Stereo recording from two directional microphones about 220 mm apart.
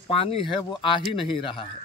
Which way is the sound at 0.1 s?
25° left (ahead or behind).